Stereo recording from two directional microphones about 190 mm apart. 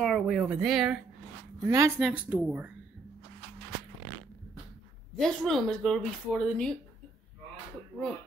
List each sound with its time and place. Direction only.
0.0 s speech: centre (ahead or behind)
1.6 s speech: 15° right (ahead or behind)
2.0 s speech: 5° right (ahead or behind)
5.1 s speech: centre (ahead or behind)